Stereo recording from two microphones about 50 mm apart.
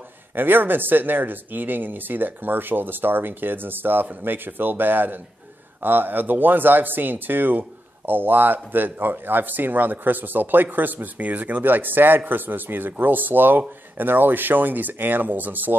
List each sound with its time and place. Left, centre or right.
0.4 s speech: right